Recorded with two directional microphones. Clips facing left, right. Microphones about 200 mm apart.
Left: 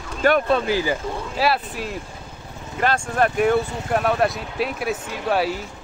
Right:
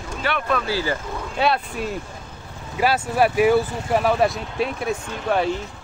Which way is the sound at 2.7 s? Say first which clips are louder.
Right 1 dB; 5° right (ahead or behind).